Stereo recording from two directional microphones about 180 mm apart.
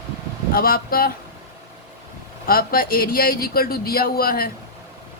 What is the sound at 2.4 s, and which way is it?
Speech, 55° left (ahead or behind).